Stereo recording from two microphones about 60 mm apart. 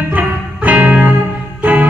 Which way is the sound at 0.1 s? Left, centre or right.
Right.